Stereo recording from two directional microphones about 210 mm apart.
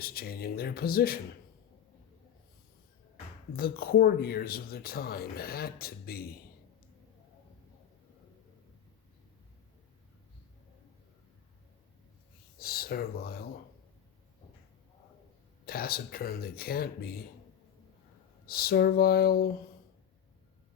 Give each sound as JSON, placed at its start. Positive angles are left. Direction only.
{"t": 0.0, "sound": "speech", "side_deg": 45}
{"t": 3.5, "sound": "speech", "side_deg": 45}
{"t": 12.5, "sound": "speech", "side_deg": 45}
{"t": 15.6, "sound": "speech", "side_deg": 45}
{"t": 18.4, "sound": "speech", "side_deg": 45}